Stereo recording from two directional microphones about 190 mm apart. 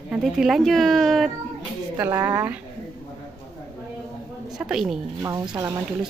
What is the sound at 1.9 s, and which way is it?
Speech, 10° right (ahead or behind).